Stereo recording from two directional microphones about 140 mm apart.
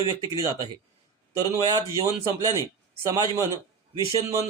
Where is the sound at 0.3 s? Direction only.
25° right (ahead or behind).